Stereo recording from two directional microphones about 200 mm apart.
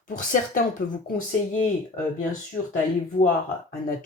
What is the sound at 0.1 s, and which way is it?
Speech, 40° left (ahead or behind).